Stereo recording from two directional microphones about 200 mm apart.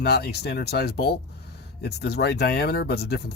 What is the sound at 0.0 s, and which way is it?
Speech, 55° left (ahead or behind).